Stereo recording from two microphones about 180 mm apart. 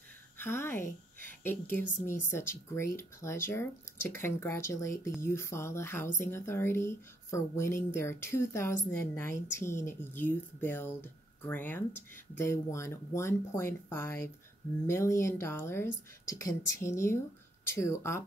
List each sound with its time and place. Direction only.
0.4 s a woman's voice: 15° left (ahead or behind)